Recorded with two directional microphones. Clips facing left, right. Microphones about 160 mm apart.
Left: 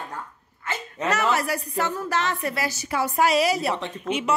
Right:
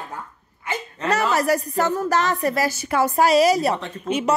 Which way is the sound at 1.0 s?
35° right (ahead or behind).